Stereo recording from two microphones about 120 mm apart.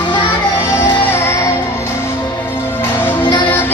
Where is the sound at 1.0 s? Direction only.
20° left (ahead or behind).